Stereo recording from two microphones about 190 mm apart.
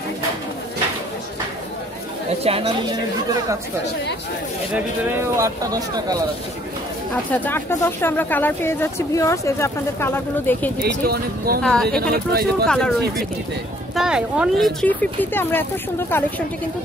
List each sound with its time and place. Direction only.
2.4 s speech: 30° right (ahead or behind)
4.7 s speech: 15° right (ahead or behind)
7.2 s speech: 10° left (ahead or behind)
10.8 s speech: 55° right (ahead or behind)
11.6 s speech: 5° left (ahead or behind)
12.1 s speech: 55° right (ahead or behind)
12.6 s speech: 5° left (ahead or behind)
13.9 s speech: 5° right (ahead or behind)